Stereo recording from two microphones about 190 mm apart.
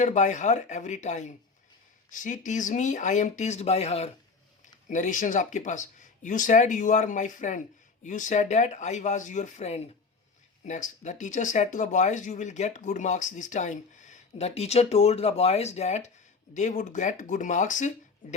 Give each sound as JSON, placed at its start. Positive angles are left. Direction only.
{"t": 0.0, "sound": "speech", "side_deg": 40}